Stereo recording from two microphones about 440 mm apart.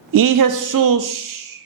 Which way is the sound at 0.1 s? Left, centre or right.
Right.